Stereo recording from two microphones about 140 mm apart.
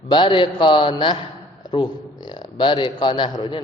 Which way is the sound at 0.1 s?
35° left (ahead or behind).